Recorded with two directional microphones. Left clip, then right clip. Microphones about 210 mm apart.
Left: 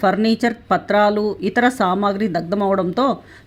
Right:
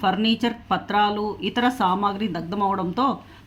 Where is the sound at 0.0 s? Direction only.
30° left (ahead or behind).